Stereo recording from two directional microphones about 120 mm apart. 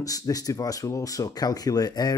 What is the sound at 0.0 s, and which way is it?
Speech, 30° left (ahead or behind).